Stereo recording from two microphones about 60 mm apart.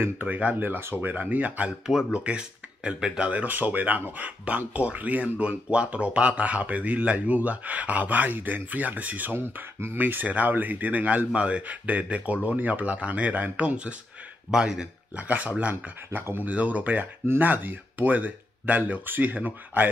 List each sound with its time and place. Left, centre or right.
0.0 s speech: right
1.7 s speech: centre; by 9.9 s right
9.9 s speech: right; by 14.9 s centre
15.1 s speech: right
15.7 s speech: right
16.5 s speech: right